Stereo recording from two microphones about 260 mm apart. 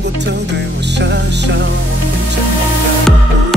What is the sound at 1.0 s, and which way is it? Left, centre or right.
Music, right.